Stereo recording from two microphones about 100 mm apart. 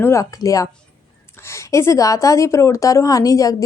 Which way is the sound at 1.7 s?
30° left (ahead or behind).